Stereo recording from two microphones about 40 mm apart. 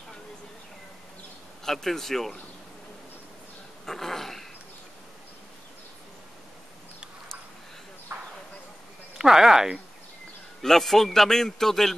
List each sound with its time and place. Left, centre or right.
1.6 s a man's voice: centre
3.8 s dog: centre
8.1 s a sound: right
9.2 s speech: centre
10.6 s a man's voice: centre